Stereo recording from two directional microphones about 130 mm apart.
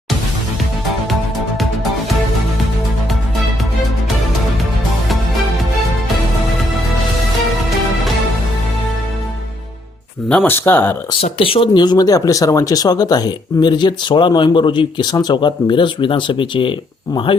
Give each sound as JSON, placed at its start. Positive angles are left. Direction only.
{"t": 1.5, "sound": "music", "side_deg": 0}
{"t": 10.2, "sound": "speech", "side_deg": 10}
{"t": 11.2, "sound": "speech", "side_deg": 45}